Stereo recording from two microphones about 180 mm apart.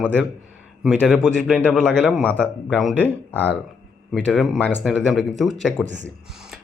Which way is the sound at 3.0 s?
10° left (ahead or behind).